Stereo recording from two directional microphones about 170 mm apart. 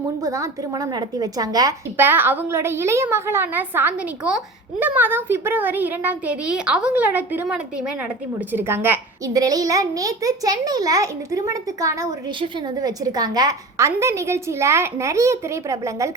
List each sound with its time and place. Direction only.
0.2 s a woman's voice: 20° right (ahead or behind)